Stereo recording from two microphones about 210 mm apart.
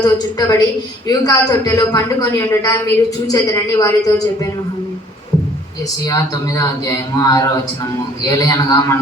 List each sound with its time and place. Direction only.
0.0 s a man's voice: 20° left (ahead or behind)
6.1 s a man's voice: 15° left (ahead or behind)